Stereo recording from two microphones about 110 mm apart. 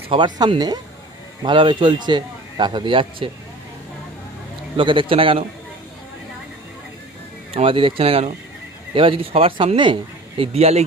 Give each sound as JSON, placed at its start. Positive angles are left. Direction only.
{"t": 0.1, "sound": "a man's voice", "side_deg": -45}
{"t": 4.8, "sound": "a man's voice", "side_deg": -50}
{"t": 7.5, "sound": "speech", "side_deg": -55}